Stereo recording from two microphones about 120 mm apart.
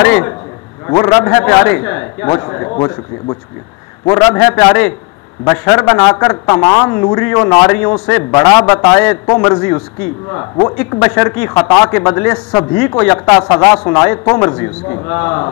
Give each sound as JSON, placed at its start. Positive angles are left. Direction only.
{"t": 0.0, "sound": "a man's voice", "side_deg": 20}
{"t": 4.2, "sound": "a man's voice", "side_deg": 25}
{"t": 6.9, "sound": "a man's voice", "side_deg": 20}
{"t": 9.2, "sound": "speech", "side_deg": 40}
{"t": 9.5, "sound": "a man's voice", "side_deg": 25}
{"t": 10.9, "sound": "a man's voice", "side_deg": 25}
{"t": 11.5, "sound": "speech", "side_deg": 35}
{"t": 11.9, "sound": "a man's voice", "side_deg": 25}
{"t": 13.2, "sound": "a man's voice", "side_deg": 30}